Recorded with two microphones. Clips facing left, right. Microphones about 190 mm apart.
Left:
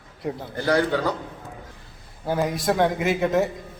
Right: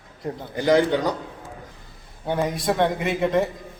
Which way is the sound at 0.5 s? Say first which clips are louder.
Right 3 dB; 20° right (ahead or behind).